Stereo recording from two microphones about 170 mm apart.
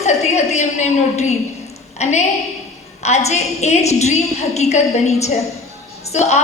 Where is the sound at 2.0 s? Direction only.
40° left (ahead or behind).